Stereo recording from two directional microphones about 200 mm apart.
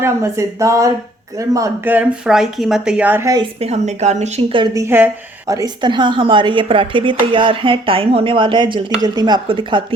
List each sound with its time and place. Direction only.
0.0 s speech: 15° right (ahead or behind)
3.6 s speech: 35° right (ahead or behind)